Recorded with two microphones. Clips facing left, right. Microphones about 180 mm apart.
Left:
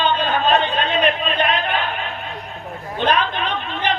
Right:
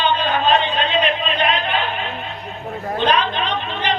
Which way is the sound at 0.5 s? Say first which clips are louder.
Even; 50° left (ahead or behind).